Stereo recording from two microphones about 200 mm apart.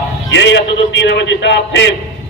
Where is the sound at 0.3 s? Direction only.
65° left (ahead or behind).